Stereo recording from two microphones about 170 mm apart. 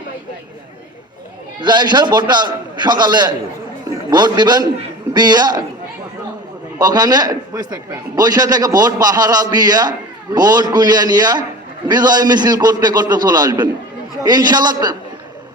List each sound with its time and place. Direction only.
1.6 s a man's voice: 25° right (ahead or behind)
6.7 s a man's voice: 25° right (ahead or behind)